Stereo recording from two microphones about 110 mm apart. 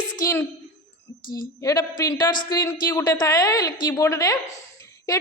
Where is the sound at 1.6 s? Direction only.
30° left (ahead or behind).